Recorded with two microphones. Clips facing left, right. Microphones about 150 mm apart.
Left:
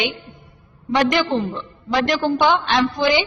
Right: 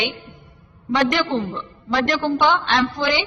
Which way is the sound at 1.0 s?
10° left (ahead or behind).